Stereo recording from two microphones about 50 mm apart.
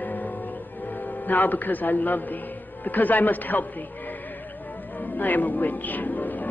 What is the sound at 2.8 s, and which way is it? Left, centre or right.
A man's voice, left.